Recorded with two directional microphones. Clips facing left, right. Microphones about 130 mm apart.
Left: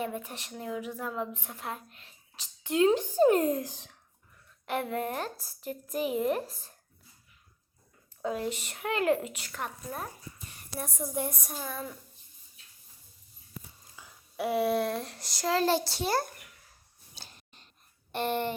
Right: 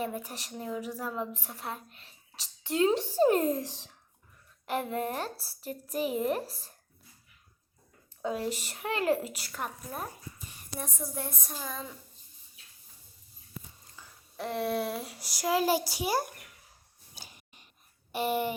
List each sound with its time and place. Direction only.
0.2 s a woman's voice: 35° right (ahead or behind)
1.0 s speech: centre (ahead or behind)
2.3 s a sound: 35° right (ahead or behind)
2.8 s speech: centre (ahead or behind)
3.1 s a woman's voice: 35° right (ahead or behind)
3.7 s speech: centre (ahead or behind)
4.6 s a woman's voice: 35° right (ahead or behind)
8.2 s a woman's voice: 35° right (ahead or behind)
9.5 s speech: 5° right (ahead or behind)
10.8 s a woman's voice: 10° left (ahead or behind)
13.9 s speech: 10° left (ahead or behind); by 16.3 s 10° right (ahead or behind)
17.2 s a sound: 10° right (ahead or behind)
18.1 s speech: 5° right (ahead or behind)